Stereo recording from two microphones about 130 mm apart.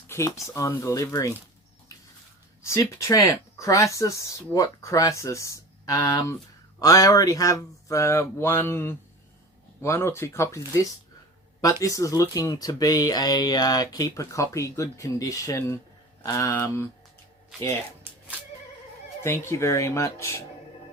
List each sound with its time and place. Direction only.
0.1 s speech: 20° left (ahead or behind)
3.0 s speech: 30° left (ahead or behind)
19.5 s speech: 20° left (ahead or behind)